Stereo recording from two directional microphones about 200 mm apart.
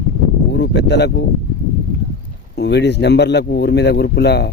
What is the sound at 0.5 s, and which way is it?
Speech, 60° left (ahead or behind).